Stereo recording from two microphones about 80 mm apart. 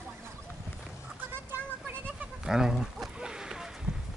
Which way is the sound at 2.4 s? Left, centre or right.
Centre.